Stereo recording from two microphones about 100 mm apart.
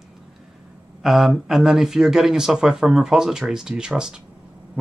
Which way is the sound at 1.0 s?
5° right (ahead or behind).